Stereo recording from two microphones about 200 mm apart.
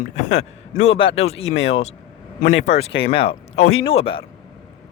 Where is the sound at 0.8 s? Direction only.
30° left (ahead or behind).